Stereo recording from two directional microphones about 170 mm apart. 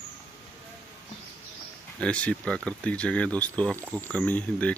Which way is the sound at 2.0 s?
5° left (ahead or behind).